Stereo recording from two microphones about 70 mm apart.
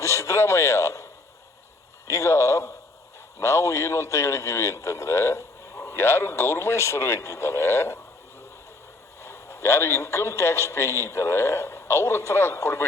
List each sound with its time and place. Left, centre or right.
0.0 s a man's voice: left
2.0 s a man's voice: left
9.2 s a man's voice: left